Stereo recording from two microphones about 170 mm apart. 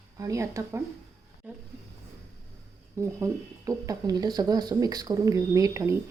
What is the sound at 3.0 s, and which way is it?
Speech, 20° right (ahead or behind).